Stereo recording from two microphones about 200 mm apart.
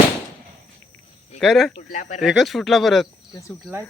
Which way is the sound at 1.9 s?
40° left (ahead or behind).